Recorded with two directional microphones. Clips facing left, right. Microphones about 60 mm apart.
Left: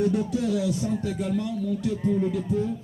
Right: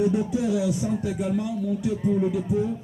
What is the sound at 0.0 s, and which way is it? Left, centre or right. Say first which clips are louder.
Speech: right 1 dB; centre.